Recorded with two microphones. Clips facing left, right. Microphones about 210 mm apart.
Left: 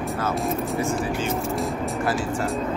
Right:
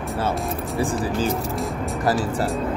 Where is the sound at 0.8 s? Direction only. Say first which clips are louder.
Right 2 dB; 35° right (ahead or behind).